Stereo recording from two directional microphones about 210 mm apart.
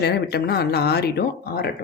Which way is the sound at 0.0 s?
50° left (ahead or behind).